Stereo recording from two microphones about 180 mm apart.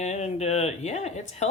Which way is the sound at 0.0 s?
40° left (ahead or behind).